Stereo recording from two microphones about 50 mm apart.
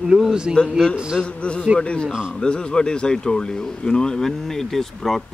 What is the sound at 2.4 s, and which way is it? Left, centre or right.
Speech, centre.